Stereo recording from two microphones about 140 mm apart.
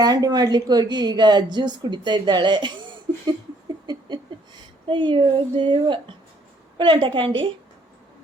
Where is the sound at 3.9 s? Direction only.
30° right (ahead or behind).